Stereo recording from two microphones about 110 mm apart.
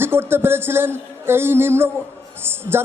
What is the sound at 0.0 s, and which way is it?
Speech, 20° right (ahead or behind).